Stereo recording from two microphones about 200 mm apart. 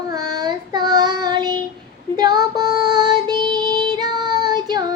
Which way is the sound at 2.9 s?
20° right (ahead or behind).